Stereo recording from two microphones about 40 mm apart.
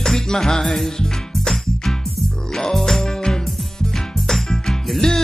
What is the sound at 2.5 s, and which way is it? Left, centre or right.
Music, centre.